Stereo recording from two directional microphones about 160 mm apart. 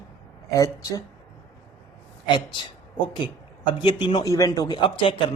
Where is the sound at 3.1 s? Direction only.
30° left (ahead or behind).